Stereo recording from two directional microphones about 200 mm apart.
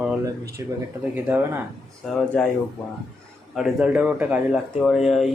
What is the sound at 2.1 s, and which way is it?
Speech, centre (ahead or behind).